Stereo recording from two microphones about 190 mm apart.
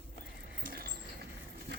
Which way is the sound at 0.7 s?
55° right (ahead or behind).